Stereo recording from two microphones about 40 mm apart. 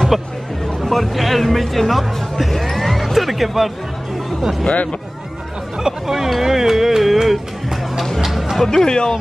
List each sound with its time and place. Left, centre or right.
0.7 s speech: centre
5.8 s speech: centre
8.2 s music: centre
8.6 s speech: centre